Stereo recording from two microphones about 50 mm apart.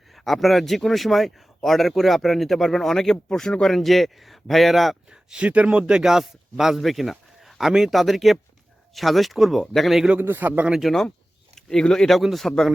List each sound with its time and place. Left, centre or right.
0.1 s speech: centre
5.1 s a man's voice: right; by 10.0 s centre
10.2 s a man's voice: right
10.8 s speech: centre
11.7 s speech: centre